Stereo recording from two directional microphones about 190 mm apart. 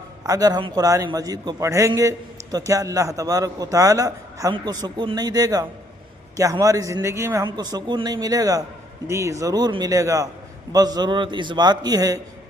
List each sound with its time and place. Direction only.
0.3 s a man's voice: 20° right (ahead or behind)